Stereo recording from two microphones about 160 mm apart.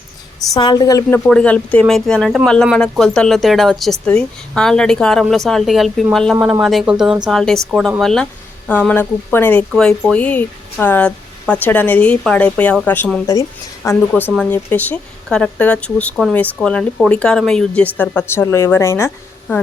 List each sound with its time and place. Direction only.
0.5 s a woman's voice: 25° left (ahead or behind)
1.3 s a woman's voice: 5° left (ahead or behind)